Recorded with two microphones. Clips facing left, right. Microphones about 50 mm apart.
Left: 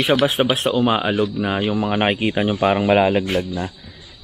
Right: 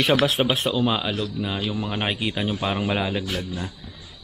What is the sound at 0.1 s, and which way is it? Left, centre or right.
Speech, left.